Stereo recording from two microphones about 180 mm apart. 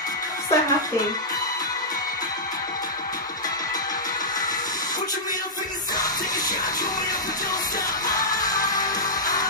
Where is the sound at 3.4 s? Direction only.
20° left (ahead or behind).